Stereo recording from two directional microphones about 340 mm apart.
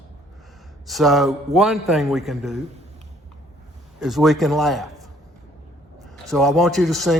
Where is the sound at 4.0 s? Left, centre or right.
Centre.